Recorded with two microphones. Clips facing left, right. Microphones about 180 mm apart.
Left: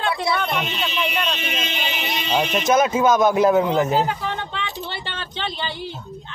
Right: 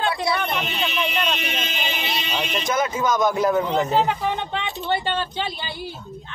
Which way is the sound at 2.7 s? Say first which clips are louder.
Left 6 dB; 20° left (ahead or behind).